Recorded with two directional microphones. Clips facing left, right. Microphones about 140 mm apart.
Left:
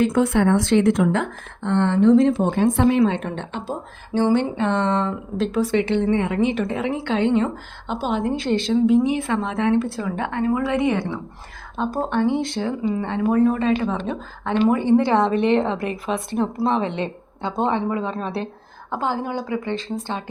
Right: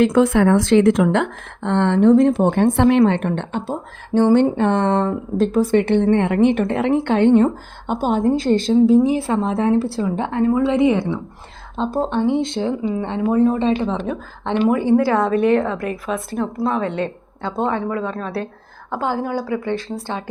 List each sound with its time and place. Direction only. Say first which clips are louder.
0.0 s a woman's voice: right 4 dB; 90° right; by 13.7 s 25° right (ahead or behind)
13.8 s speech: right 2 dB; 15° right (ahead or behind)
15.5 s speech: right 1 dB; 25° left (ahead or behind)
16.8 s speech: right 3 dB; centre (ahead or behind)
17.8 s speech: right 1 dB; 15° left (ahead or behind)
18.9 s a woman's voice: right 2 dB; 10° right (ahead or behind)